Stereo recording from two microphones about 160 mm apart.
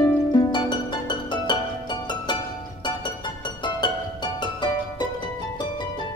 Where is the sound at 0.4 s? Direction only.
25° left (ahead or behind).